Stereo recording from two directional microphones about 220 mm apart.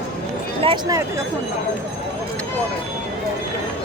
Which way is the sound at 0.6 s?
20° right (ahead or behind).